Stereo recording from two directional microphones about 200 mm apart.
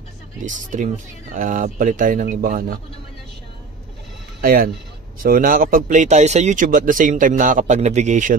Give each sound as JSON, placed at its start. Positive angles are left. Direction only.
{"t": 0.4, "sound": "speech", "side_deg": -40}
{"t": 4.4, "sound": "speech", "side_deg": -45}